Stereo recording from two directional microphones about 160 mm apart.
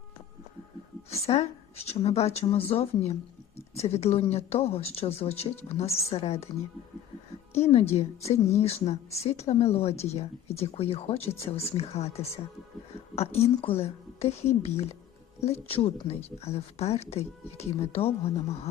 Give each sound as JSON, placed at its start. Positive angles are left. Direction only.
{"t": 1.1, "sound": "speech", "side_deg": 40}
{"t": 7.6, "sound": "a woman's voice", "side_deg": 40}